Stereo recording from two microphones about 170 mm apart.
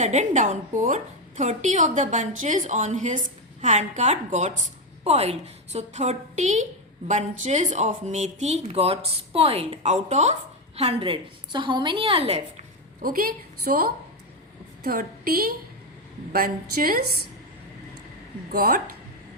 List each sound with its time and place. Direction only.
0.0 s a woman's voice: 45° right (ahead or behind)
13.0 s a woman's voice: 60° right (ahead or behind)
18.5 s a woman's voice: 60° right (ahead or behind)